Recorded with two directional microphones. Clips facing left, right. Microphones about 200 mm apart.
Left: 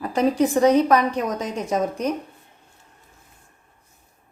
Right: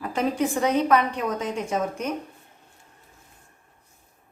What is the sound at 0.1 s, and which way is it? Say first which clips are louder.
A woman's voice: left 5 dB; 40° left (ahead or behind).